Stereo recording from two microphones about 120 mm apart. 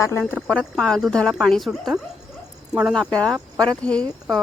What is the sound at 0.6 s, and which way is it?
Speech, 5° left (ahead or behind).